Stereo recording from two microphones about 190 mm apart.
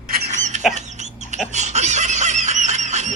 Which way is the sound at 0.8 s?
40° right (ahead or behind).